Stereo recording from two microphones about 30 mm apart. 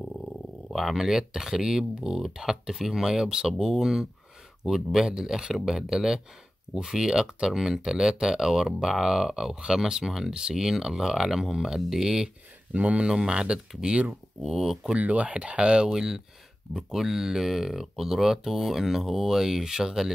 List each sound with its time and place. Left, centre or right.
0.7 s speech: centre
12.7 s speech: right
13.3 s speech: right
14.4 s speech: centre
15.0 s speech: right
15.9 s speech: centre
16.7 s speech: centre